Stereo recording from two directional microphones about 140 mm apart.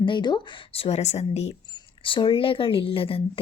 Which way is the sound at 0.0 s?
35° left (ahead or behind).